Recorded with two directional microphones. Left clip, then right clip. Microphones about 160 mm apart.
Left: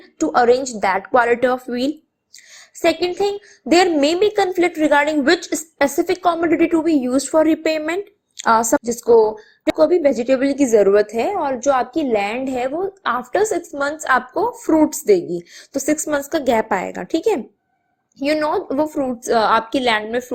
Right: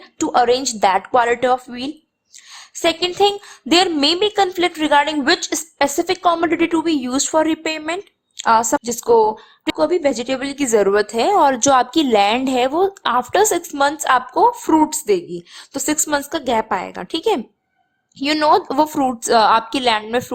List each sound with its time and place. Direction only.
0.2 s a woman's voice: 15° right (ahead or behind)
2.6 s a sound: 5° right (ahead or behind)
3.2 s a woman's voice: 15° right (ahead or behind); by 8.8 s centre (ahead or behind)
8.8 s a woman's voice: 15° right (ahead or behind)
11.3 s a woman's voice: 30° right (ahead or behind); by 17.4 s 10° right (ahead or behind)
18.5 s a woman's voice: 25° right (ahead or behind)
19.3 s a woman's voice: 10° right (ahead or behind)